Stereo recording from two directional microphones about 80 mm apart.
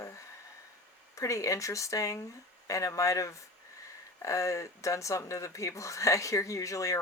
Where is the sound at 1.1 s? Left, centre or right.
Left.